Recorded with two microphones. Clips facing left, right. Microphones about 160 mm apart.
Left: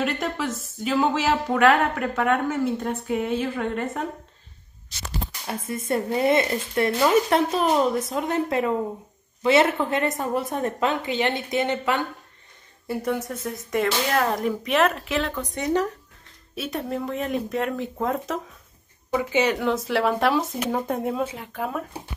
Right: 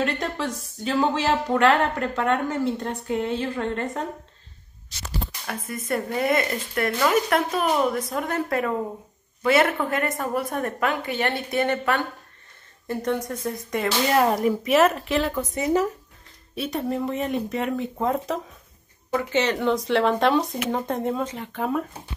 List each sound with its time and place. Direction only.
0.0 s speech: 5° left (ahead or behind)
5.5 s speech: 25° left (ahead or behind); by 18.4 s centre (ahead or behind)
19.1 s speech: 10° left (ahead or behind)